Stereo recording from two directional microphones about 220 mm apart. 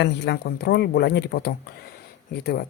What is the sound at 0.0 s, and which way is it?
Speech, 50° left (ahead or behind).